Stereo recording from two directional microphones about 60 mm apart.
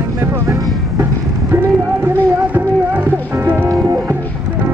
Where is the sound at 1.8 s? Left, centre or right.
Right.